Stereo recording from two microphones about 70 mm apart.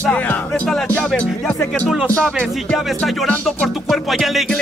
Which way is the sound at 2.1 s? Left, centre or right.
Centre.